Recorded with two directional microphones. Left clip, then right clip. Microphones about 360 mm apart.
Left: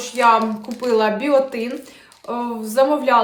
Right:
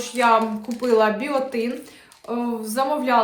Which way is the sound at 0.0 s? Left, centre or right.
Centre.